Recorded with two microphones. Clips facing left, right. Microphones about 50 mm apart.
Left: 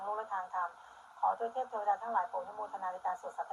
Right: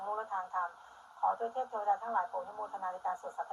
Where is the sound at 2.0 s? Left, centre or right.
Centre.